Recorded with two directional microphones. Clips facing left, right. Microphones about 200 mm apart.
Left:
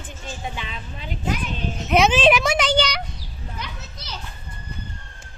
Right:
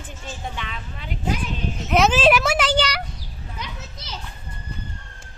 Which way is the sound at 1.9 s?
Centre (ahead or behind).